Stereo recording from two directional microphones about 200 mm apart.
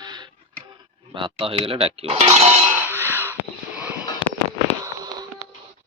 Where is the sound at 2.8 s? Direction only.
10° right (ahead or behind).